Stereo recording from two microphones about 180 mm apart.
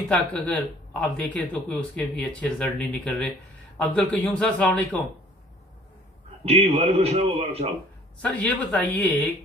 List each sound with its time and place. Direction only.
0.1 s speech: 5° left (ahead or behind)
6.4 s a man's voice: 35° right (ahead or behind)
8.2 s speech: 5° left (ahead or behind)